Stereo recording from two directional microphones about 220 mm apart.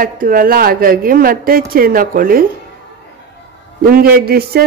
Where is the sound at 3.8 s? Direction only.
45° right (ahead or behind).